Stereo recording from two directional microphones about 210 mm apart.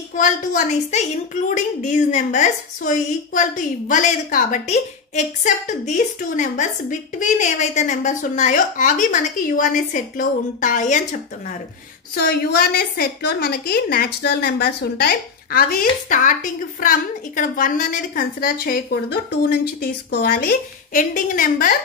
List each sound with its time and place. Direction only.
0.1 s a woman's voice: 40° left (ahead or behind)
12.2 s a woman's voice: 45° left (ahead or behind)
17.4 s a woman's voice: 40° left (ahead or behind)